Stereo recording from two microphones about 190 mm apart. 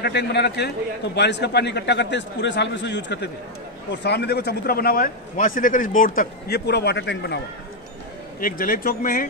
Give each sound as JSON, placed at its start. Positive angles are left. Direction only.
{"t": 0.0, "sound": "a man's voice", "side_deg": 60}
{"t": 8.4, "sound": "speech", "side_deg": 45}